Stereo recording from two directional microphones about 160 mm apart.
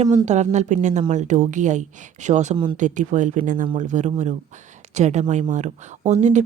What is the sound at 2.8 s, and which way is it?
Speech, 50° right (ahead or behind).